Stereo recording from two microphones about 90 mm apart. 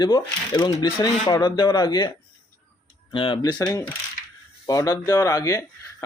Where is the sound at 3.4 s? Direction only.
45° left (ahead or behind).